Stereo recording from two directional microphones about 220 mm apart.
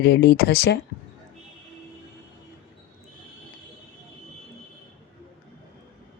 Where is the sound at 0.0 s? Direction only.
50° left (ahead or behind).